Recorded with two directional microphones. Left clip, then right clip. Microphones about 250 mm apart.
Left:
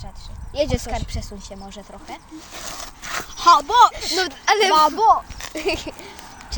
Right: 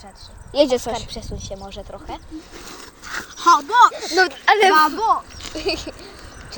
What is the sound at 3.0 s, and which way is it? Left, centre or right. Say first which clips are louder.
Speech: left 1 dB; left.